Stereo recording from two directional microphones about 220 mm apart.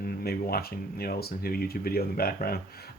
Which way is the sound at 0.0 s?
45° left (ahead or behind).